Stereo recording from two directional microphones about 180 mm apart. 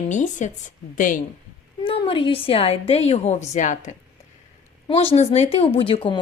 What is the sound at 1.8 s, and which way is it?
Speech, 30° left (ahead or behind).